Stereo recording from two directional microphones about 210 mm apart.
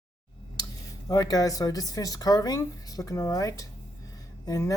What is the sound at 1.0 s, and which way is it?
Speech, 15° left (ahead or behind).